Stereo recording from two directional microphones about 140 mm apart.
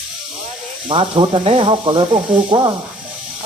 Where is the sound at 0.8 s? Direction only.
35° right (ahead or behind).